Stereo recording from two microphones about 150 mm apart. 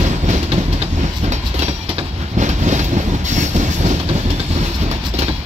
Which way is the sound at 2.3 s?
50° right (ahead or behind).